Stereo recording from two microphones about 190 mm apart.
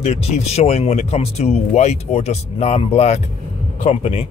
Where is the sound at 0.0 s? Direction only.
35° left (ahead or behind).